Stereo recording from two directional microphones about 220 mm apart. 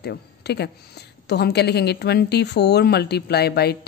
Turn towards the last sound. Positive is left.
turn(degrees=45)  # may be behind; listen again after turning